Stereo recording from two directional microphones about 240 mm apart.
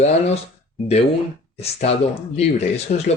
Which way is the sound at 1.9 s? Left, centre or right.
Left.